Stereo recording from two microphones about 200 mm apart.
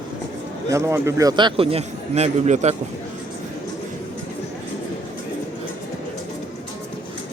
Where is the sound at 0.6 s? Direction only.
15° right (ahead or behind); by 2.8 s 35° right (ahead or behind).